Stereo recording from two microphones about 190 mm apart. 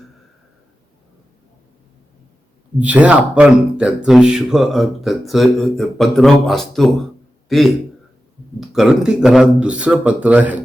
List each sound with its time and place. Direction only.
2.7 s speech: 10° right (ahead or behind)
7.4 s a sound: centre (ahead or behind)
8.7 s speech: 5° right (ahead or behind)